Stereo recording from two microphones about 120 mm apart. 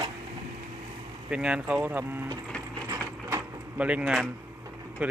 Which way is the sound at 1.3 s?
10° right (ahead or behind).